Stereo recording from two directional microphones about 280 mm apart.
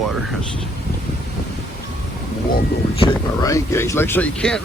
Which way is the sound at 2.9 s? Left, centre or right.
Centre.